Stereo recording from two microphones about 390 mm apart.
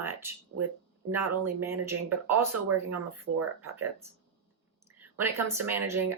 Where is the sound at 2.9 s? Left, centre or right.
Right.